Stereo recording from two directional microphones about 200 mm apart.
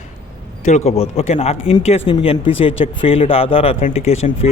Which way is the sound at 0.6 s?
35° left (ahead or behind).